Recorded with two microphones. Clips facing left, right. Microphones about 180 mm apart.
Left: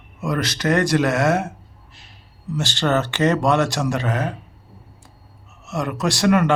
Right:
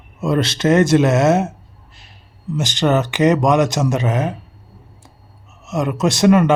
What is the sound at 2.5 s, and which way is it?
A man's voice, 20° right (ahead or behind).